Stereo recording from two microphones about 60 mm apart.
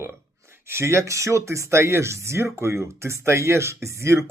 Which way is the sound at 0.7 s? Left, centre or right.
Right.